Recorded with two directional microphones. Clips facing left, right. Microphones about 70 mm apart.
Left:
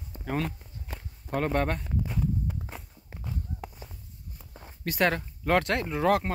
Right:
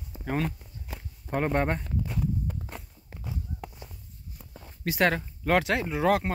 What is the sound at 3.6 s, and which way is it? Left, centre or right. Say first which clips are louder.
Walk: even; centre.